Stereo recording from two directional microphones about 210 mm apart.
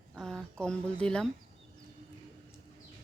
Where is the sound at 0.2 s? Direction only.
Centre (ahead or behind).